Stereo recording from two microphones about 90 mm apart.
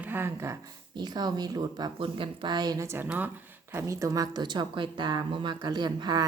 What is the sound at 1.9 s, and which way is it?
Speech, 75° right (ahead or behind).